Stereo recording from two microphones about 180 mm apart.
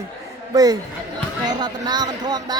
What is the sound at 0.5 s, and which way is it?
Speech, 20° right (ahead or behind).